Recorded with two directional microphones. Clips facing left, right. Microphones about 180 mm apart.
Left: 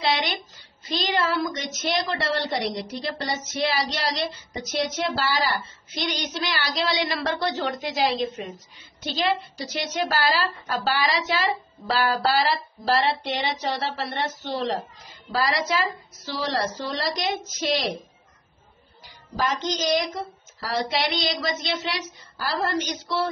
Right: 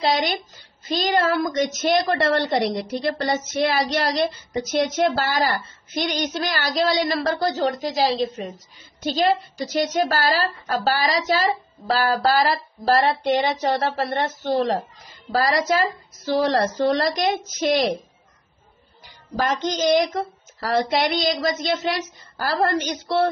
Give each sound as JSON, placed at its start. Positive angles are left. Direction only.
{"t": 0.0, "sound": "a sound", "side_deg": -45}
{"t": 0.8, "sound": "a woman's voice", "side_deg": -50}
{"t": 19.0, "sound": "a woman's voice", "side_deg": -55}